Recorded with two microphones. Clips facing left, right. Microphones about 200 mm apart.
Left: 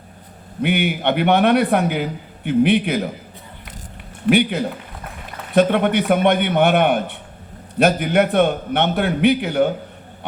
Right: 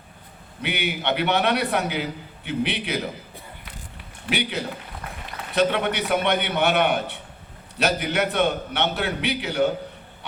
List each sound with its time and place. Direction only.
0.6 s a man's voice: 55° left (ahead or behind)
4.3 s a man's voice: 55° left (ahead or behind)